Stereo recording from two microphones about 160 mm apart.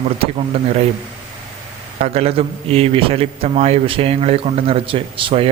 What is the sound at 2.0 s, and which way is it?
A man's voice, 40° right (ahead or behind).